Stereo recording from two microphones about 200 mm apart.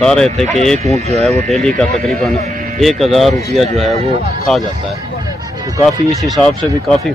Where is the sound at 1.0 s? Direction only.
30° right (ahead or behind).